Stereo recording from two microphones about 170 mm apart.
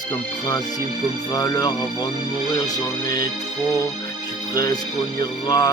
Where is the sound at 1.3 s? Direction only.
20° left (ahead or behind).